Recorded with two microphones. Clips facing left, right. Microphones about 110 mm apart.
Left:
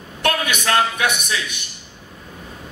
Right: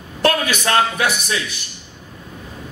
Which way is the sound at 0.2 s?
35° right (ahead or behind).